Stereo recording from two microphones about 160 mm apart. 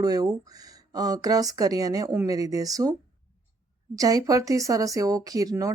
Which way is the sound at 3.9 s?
20° right (ahead or behind).